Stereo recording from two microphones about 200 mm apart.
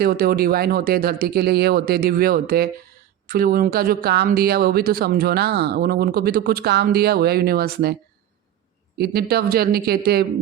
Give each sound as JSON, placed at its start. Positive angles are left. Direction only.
{"t": 0.0, "sound": "speech", "side_deg": -50}
{"t": 9.0, "sound": "speech", "side_deg": -50}